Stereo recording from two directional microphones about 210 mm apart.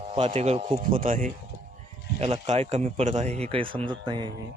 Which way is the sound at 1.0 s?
40° right (ahead or behind).